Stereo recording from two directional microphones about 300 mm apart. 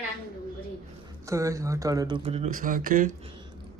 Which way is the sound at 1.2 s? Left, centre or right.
Centre.